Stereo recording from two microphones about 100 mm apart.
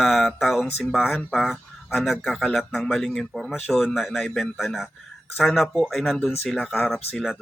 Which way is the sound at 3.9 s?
Centre (ahead or behind).